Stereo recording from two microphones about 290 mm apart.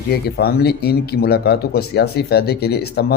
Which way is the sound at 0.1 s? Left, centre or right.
Left.